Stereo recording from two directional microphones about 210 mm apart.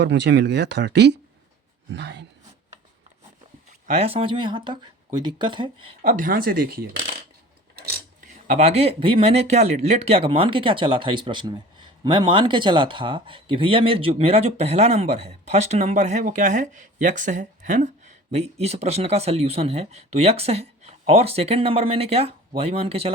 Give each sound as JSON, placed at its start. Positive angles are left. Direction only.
{"t": 0.0, "sound": "speech", "side_deg": -55}
{"t": 3.7, "sound": "speech", "side_deg": -35}
{"t": 6.0, "sound": "speech", "side_deg": -40}